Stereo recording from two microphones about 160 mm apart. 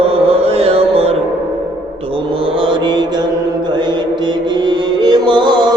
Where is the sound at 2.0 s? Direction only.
35° right (ahead or behind).